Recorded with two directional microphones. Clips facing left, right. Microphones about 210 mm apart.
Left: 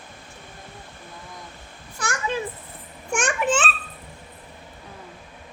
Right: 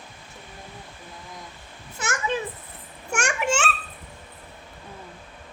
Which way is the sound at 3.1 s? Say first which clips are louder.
Left 2 dB; 10° right (ahead or behind).